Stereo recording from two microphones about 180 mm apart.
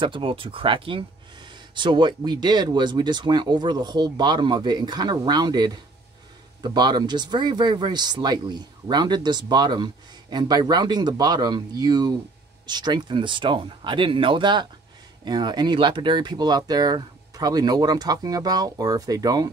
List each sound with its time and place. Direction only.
0.0 s speech: 30° right (ahead or behind)